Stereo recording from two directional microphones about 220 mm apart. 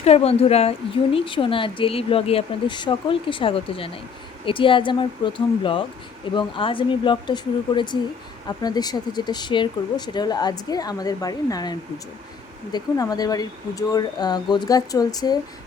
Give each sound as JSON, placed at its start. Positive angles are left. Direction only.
{"t": 0.0, "sound": "speech", "side_deg": 25}